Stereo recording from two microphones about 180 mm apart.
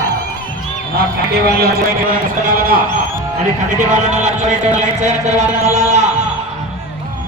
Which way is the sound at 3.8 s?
45° right (ahead or behind).